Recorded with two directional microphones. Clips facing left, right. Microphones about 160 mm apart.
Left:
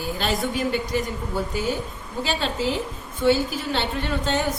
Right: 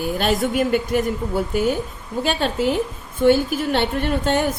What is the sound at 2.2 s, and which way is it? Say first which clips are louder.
A woman's voice: right 5 dB; 55° right (ahead or behind).